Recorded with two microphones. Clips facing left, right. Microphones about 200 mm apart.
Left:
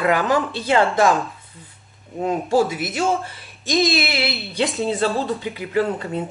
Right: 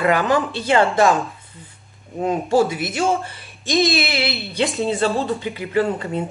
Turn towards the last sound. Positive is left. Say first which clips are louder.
# right 1 dB
turn(degrees=0)  # may be behind; listen again after turning